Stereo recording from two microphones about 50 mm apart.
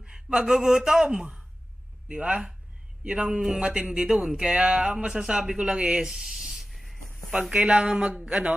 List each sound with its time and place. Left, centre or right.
0.0 s speech: centre
5.2 s writing: centre
7.5 s speech: right